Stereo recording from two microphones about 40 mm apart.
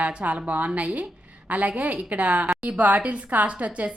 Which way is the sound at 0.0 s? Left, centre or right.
Right.